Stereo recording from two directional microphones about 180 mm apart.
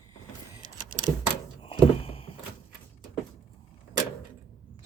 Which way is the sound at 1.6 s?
30° left (ahead or behind).